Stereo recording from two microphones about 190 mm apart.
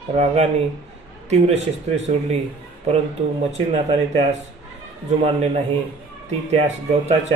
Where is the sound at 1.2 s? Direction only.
35° right (ahead or behind).